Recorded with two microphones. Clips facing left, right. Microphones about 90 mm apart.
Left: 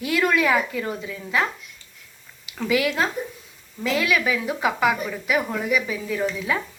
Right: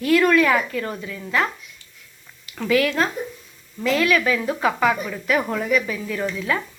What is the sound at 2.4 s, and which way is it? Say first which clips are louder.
Speech: right 2 dB; 15° left (ahead or behind).